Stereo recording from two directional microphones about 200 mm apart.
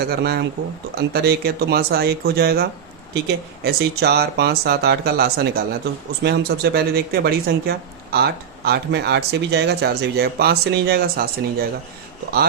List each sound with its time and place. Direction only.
0.0 s speech: 55° right (ahead or behind)